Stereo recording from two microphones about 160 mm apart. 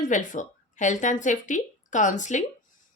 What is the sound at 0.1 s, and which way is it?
Speech, 50° left (ahead or behind).